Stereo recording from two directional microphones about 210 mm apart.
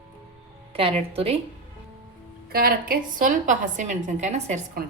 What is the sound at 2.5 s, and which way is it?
A woman's voice, 45° right (ahead or behind).